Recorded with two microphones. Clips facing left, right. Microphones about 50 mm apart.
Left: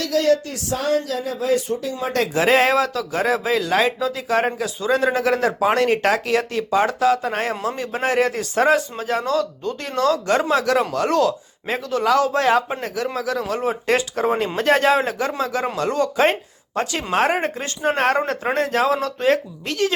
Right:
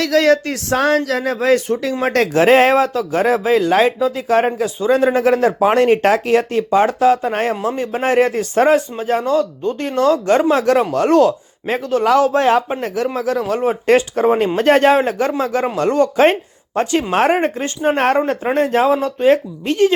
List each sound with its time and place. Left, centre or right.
0.0 s speech: right
2.5 s speech: right
8.0 s speech: right